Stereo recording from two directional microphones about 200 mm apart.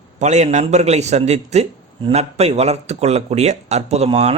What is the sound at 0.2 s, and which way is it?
Speech, 35° right (ahead or behind).